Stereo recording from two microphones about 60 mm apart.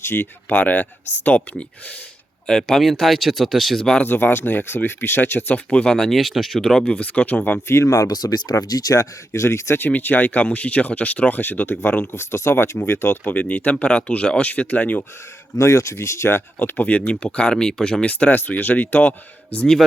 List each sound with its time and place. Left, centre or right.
0.0 s speech: left
0.4 s speech: left
2.5 s speech: centre
4.0 s speech: left
5.7 s speech: centre
6.8 s speech: left
7.7 s speech: left
9.7 s speech: left
12.1 s speech: left
13.3 s speech: left
15.5 s speech: left
16.6 s speech: left; by 18.0 s centre
18.0 s speech: left